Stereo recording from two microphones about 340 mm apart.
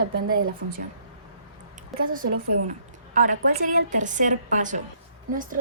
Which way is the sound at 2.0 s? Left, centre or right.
Right.